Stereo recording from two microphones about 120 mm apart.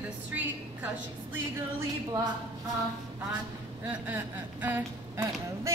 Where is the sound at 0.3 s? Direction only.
15° right (ahead or behind).